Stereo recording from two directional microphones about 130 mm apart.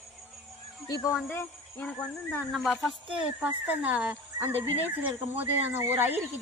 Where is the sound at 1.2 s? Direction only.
15° left (ahead or behind).